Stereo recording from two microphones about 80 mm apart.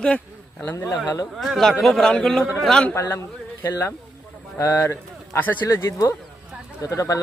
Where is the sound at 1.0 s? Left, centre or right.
Left.